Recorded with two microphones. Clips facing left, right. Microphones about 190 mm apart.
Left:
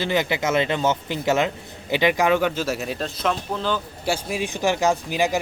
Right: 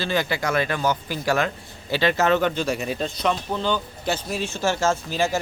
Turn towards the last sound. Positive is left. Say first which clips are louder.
# left 1 dB
turn(degrees=15)  # may be behind; listen again after turning